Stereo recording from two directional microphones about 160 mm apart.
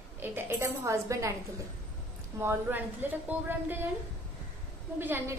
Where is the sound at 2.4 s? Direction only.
15° right (ahead or behind).